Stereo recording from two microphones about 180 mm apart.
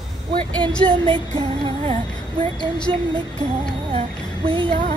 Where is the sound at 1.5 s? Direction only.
30° right (ahead or behind).